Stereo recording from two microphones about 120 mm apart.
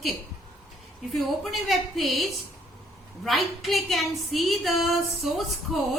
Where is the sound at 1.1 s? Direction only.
Centre (ahead or behind).